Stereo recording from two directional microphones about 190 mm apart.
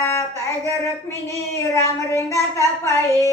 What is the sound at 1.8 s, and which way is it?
Child singing, 15° left (ahead or behind).